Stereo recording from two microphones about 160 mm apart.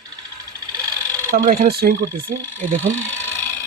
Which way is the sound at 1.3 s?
60° right (ahead or behind).